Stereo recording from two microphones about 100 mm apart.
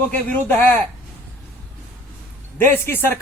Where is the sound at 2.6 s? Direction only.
20° left (ahead or behind).